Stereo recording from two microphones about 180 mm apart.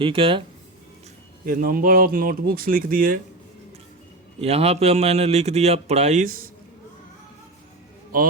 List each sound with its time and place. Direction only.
0.0 s speech: 30° right (ahead or behind)
1.5 s speech: 50° right (ahead or behind)
4.4 s a man's voice: 35° right (ahead or behind)